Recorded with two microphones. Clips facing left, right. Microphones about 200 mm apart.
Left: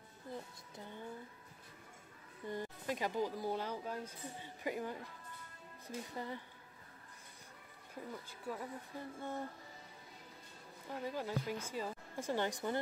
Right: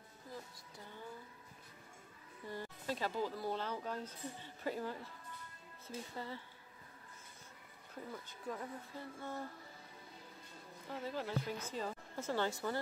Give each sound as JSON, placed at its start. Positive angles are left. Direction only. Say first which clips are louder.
{"t": 2.4, "sound": "speech", "louder": "left 2 dB", "side_deg": 20}
{"t": 8.3, "sound": "speech", "louder": "even", "side_deg": 10}
{"t": 10.9, "sound": "speech", "louder": "left 1 dB", "side_deg": 15}